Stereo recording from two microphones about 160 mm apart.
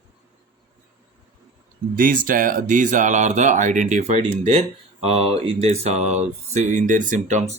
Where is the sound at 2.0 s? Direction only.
60° right (ahead or behind).